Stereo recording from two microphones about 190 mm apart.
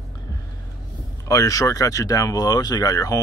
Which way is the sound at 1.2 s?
15° left (ahead or behind).